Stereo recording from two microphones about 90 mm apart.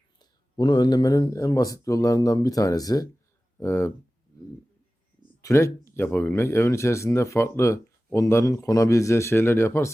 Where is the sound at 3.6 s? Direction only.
30° left (ahead or behind).